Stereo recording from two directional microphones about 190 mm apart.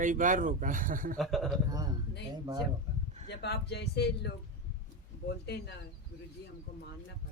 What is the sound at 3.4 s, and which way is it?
Speech, 60° left (ahead or behind).